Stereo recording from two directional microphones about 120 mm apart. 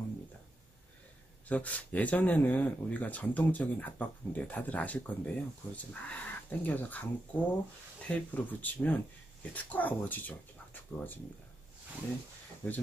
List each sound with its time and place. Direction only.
1.5 s speech: 10° left (ahead or behind)
12.6 s speech: 15° left (ahead or behind)